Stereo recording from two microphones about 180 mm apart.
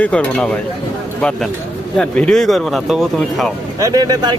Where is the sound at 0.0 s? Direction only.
5° left (ahead or behind).